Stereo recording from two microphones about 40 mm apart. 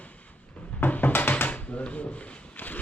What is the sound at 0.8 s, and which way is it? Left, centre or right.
Music, left.